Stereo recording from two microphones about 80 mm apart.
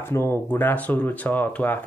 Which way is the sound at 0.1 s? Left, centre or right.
Left.